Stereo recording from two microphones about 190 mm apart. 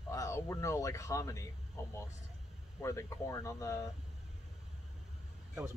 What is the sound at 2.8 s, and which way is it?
Speech, 15° left (ahead or behind).